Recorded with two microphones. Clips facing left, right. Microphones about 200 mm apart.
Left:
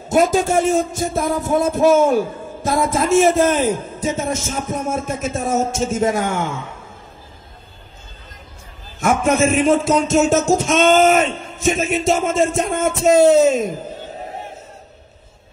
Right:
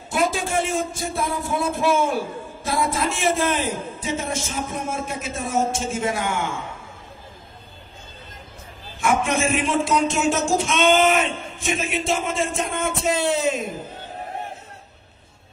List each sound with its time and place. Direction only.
0.1 s speech: 40° left (ahead or behind)
9.0 s speech: 45° left (ahead or behind)